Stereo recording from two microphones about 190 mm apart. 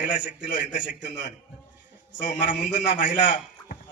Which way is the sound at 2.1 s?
45° left (ahead or behind).